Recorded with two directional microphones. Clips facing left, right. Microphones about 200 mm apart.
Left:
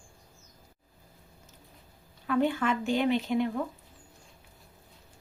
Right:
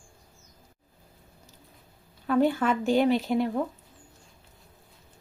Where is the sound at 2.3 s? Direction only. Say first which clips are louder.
Right 3 dB; 40° right (ahead or behind).